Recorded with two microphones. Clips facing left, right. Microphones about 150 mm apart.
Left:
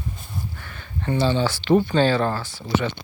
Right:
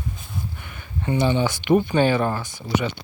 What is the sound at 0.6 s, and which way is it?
Speech, 15° right (ahead or behind).